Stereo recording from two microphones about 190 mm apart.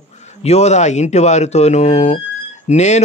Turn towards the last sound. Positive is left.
turn(degrees=35)  # may be behind; listen again after turning